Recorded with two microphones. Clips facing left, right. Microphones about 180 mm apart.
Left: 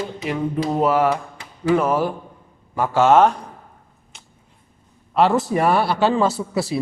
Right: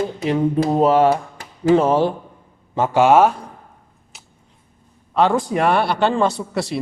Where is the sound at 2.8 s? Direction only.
15° right (ahead or behind).